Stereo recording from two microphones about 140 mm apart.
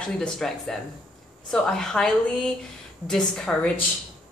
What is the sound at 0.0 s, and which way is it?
A woman's voice, 5° left (ahead or behind).